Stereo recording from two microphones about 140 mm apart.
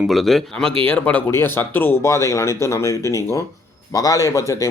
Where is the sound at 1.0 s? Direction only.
15° left (ahead or behind).